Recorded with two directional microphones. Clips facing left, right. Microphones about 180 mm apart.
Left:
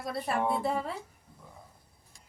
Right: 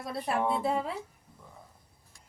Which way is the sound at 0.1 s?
Centre (ahead or behind).